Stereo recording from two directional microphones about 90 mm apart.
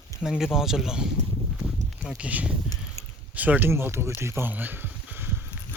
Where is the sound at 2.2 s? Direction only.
15° right (ahead or behind).